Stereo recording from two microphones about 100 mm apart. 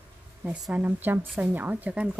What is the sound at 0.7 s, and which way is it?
Speech, 20° right (ahead or behind).